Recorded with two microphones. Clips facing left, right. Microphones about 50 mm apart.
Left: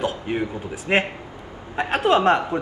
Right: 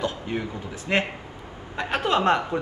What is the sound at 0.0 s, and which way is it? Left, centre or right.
A man's voice, left.